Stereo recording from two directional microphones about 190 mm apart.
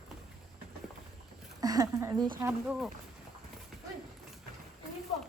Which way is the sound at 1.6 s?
20° right (ahead or behind).